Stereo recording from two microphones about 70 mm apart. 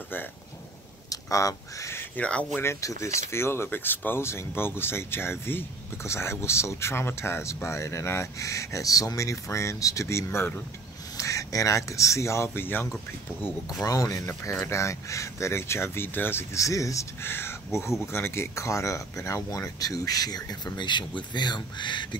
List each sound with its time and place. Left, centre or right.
1.1 s speech: left
2.1 s speech: centre
2.6 s speech: left
11.1 s speech: left
13.8 s speech: left
14.2 s speech: left
16.5 s speech: left
17.2 s speech: left